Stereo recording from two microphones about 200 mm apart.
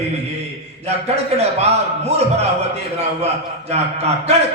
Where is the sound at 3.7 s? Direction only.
30° right (ahead or behind).